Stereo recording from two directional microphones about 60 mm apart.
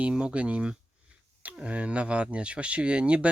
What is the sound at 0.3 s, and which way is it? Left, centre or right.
Speech, right.